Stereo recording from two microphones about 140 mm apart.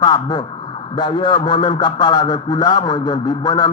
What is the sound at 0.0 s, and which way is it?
A man's voice, 30° left (ahead or behind).